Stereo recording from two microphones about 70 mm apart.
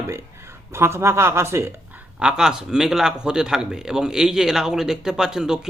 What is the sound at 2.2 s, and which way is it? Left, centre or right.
A man's voice, centre.